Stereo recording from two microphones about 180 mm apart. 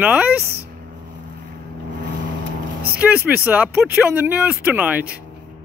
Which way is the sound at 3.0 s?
5° right (ahead or behind).